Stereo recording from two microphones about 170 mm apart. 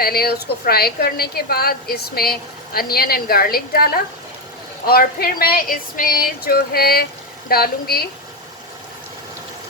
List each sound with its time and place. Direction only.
0.0 s a woman's voice: 65° left (ahead or behind)